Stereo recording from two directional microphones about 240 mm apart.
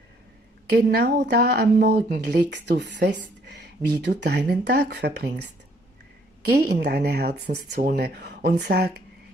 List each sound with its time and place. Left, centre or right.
0.7 s speech: right